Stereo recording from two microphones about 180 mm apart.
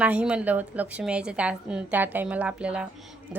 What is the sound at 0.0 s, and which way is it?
A woman's voice, 5° right (ahead or behind).